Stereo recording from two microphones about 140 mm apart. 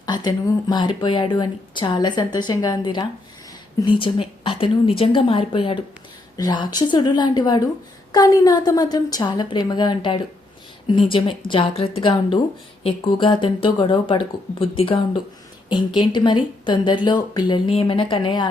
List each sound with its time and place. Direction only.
0.0 s a woman's voice: 30° left (ahead or behind)